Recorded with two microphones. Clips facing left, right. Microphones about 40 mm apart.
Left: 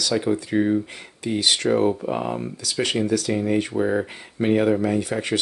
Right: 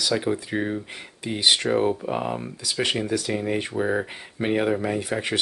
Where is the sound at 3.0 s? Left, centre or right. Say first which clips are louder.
Left 3 dB; centre.